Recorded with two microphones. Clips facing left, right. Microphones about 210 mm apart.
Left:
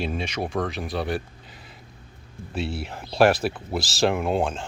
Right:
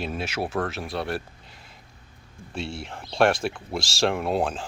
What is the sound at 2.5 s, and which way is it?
Speech, 5° left (ahead or behind).